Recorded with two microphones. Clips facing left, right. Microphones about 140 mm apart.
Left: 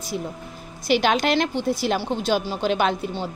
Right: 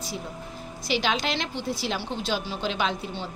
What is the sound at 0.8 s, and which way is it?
A woman's voice, 55° left (ahead or behind).